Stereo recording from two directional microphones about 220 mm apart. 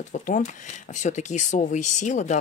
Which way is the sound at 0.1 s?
35° left (ahead or behind).